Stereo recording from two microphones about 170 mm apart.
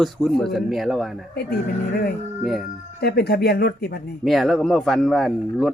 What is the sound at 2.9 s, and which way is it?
Speech, 70° left (ahead or behind).